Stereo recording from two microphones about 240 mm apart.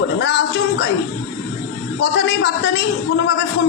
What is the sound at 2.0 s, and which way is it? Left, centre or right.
Speech, left.